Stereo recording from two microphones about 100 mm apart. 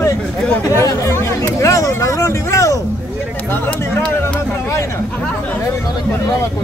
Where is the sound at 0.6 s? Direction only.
35° left (ahead or behind).